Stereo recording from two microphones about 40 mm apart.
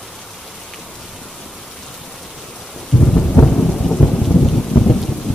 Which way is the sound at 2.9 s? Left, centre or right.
Centre.